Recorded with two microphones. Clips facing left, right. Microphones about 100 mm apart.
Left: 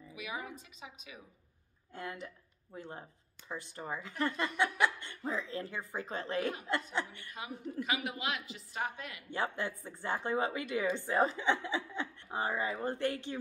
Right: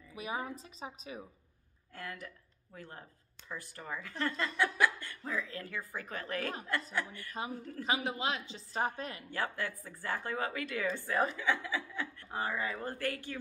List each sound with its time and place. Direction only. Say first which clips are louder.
0.1 s a woman's voice: right 4 dB; 35° right (ahead or behind)
2.0 s speech: left 2 dB; 20° left (ahead or behind)
7.4 s a woman's voice: even; 35° right (ahead or behind)
9.3 s speech: left 3 dB; 20° left (ahead or behind)